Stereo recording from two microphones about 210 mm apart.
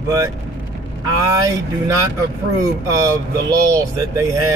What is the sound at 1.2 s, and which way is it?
Speech, 15° right (ahead or behind).